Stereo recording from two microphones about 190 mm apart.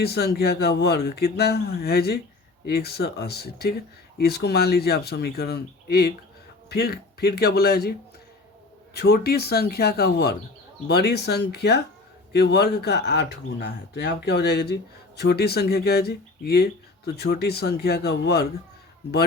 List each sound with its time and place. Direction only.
0.0 s speech: 60° left (ahead or behind)